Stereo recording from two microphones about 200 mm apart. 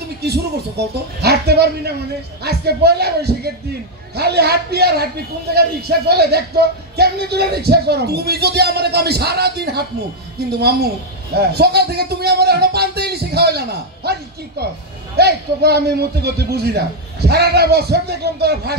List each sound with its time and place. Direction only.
0.2 s a man's voice: 55° right (ahead or behind)
11.3 s a man's voice: 55° right (ahead or behind)
15.1 s a man's voice: 55° right (ahead or behind)